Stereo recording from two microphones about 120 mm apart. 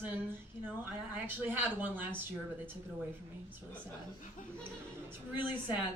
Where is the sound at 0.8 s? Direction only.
15° right (ahead or behind).